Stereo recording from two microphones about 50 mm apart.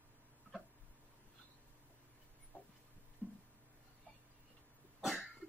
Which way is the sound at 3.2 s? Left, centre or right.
Right.